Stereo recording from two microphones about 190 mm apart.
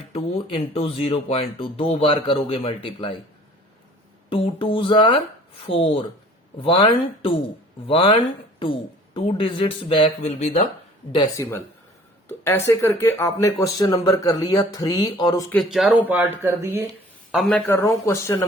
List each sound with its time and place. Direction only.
0.1 s speech: 30° left (ahead or behind)
4.3 s speech: 30° left (ahead or behind)
11.1 s speech: 20° left (ahead or behind)
15.5 s speech: centre (ahead or behind)
17.3 s speech: centre (ahead or behind)
17.7 s speech: 15° left (ahead or behind)